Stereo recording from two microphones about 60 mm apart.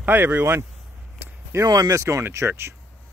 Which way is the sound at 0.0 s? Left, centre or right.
Right.